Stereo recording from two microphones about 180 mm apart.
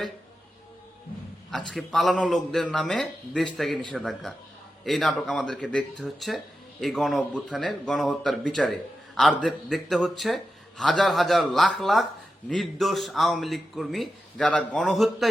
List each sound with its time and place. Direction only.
1.5 s speech: centre (ahead or behind)